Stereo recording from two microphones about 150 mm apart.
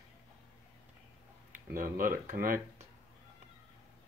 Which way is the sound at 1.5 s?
70° right (ahead or behind).